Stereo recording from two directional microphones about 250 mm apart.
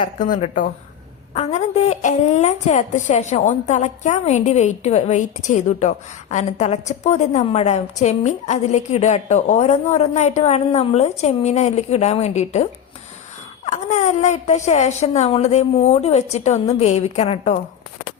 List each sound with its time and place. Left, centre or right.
0.2 s a woman's voice: left
13.7 s a woman's voice: left